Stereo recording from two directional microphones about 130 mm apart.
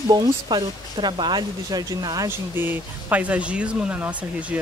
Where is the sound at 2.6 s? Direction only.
15° right (ahead or behind).